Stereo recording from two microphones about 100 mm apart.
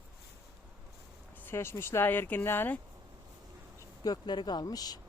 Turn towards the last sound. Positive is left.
turn(degrees=40)  # may be behind; listen again after turning